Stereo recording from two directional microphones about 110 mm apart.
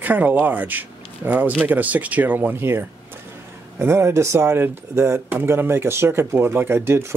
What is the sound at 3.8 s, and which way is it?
Speech, 25° right (ahead or behind).